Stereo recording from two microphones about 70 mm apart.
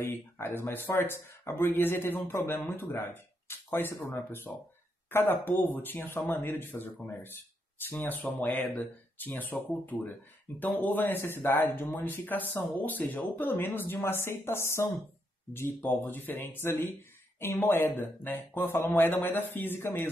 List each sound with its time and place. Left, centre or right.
0.1 s speech: left
15.8 s speech: left